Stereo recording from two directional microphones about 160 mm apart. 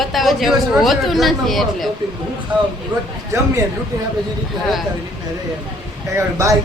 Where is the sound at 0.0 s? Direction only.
Centre (ahead or behind).